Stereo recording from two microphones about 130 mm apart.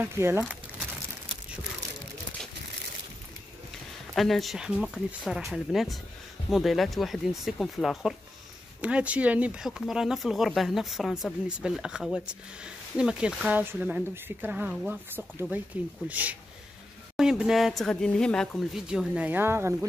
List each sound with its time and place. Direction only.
0.0 s speech: 15° right (ahead or behind)
4.1 s speech: centre (ahead or behind)
18.9 s speech: 10° right (ahead or behind)